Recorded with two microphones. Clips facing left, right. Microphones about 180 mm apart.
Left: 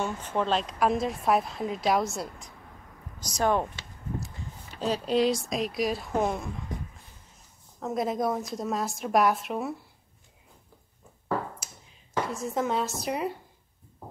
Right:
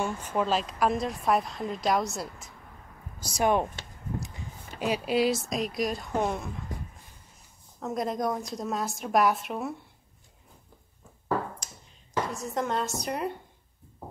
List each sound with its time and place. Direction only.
0.0 s a woman's voice: 10° right (ahead or behind)
4.7 s a woman's voice: 10° right (ahead or behind)
7.8 s a woman's voice: centre (ahead or behind)
12.3 s a woman's voice: centre (ahead or behind)